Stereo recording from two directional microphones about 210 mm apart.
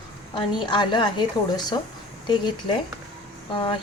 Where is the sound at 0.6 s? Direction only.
20° left (ahead or behind).